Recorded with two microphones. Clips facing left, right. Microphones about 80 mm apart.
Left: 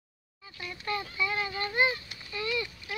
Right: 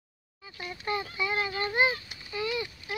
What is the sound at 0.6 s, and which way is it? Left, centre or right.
A child's voice, right.